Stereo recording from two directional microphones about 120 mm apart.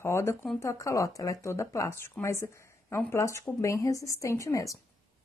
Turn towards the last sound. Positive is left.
turn(degrees=25)  # may be behind; listen again after turning